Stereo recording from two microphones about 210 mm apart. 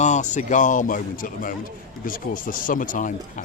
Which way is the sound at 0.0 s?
35° left (ahead or behind).